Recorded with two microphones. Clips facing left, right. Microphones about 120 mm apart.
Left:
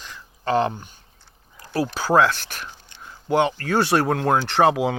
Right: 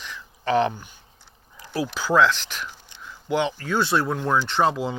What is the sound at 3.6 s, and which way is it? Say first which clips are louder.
Speech: left 3 dB; 65° left (ahead or behind).